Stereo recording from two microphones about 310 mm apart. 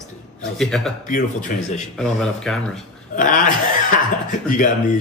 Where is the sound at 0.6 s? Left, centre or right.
Centre.